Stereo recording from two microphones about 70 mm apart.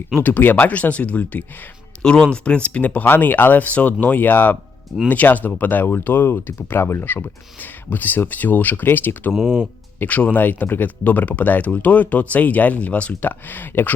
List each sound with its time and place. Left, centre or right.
0.2 s speech: left
2.0 s speech: centre; by 9.3 s left
9.3 s speech: centre
10.0 s speech: left